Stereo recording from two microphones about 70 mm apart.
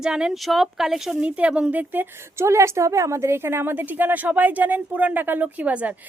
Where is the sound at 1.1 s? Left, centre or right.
Right.